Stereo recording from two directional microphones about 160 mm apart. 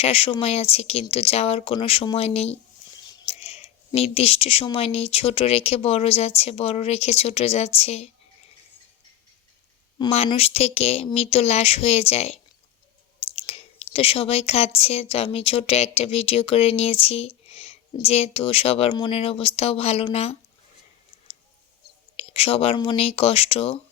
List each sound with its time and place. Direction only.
0.0 s a woman's voice: 40° left (ahead or behind)
10.2 s a woman's voice: 40° left (ahead or behind)
22.1 s a woman's voice: 40° left (ahead or behind)